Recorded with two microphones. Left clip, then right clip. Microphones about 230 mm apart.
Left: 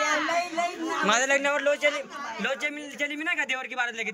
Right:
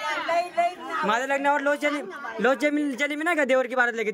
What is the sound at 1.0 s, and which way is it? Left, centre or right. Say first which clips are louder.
A man's voice: left 1 dB; centre.